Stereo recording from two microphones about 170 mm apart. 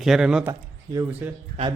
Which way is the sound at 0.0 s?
5° right (ahead or behind).